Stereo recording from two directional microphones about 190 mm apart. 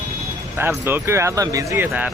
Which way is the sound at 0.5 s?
10° right (ahead or behind).